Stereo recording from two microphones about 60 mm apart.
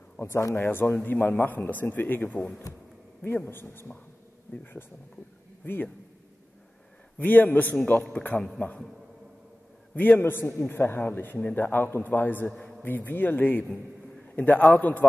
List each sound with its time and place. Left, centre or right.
0.2 s speech: left
0.7 s a man's voice: left
7.2 s a man's voice: left
9.9 s a man's voice: left